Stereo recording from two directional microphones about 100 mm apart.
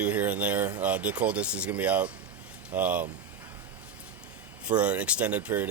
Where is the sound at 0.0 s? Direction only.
15° right (ahead or behind).